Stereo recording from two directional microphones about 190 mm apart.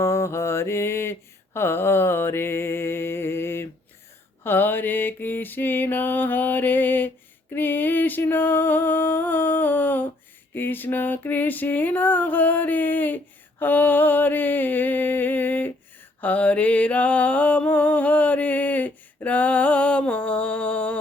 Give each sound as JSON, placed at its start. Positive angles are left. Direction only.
{"t": 0.0, "sound": "mantra", "side_deg": 15}
{"t": 7.5, "sound": "music", "side_deg": 10}
{"t": 10.5, "sound": "mantra", "side_deg": 10}
{"t": 16.2, "sound": "music", "side_deg": 5}